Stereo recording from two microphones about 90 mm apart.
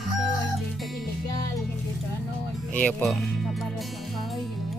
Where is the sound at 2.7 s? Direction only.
15° left (ahead or behind).